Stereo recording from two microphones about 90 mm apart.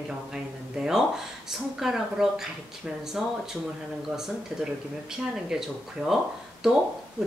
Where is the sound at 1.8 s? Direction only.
5° right (ahead or behind).